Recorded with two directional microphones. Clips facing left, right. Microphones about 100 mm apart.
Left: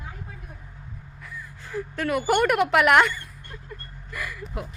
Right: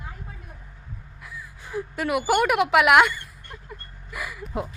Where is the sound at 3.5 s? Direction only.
15° right (ahead or behind).